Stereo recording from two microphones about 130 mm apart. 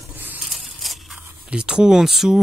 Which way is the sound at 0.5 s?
Centre (ahead or behind).